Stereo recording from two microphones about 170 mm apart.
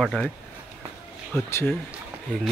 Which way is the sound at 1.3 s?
10° left (ahead or behind).